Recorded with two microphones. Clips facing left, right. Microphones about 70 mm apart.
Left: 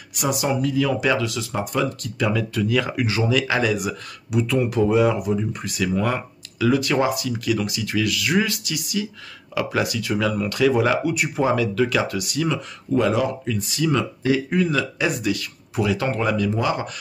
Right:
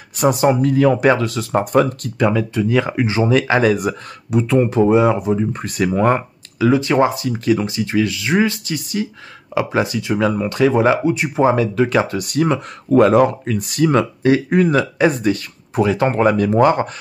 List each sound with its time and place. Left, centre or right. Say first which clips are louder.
0.1 s speech: right 8 dB; right